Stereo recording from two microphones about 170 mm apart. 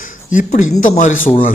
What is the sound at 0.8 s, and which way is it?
Speech, 50° left (ahead or behind).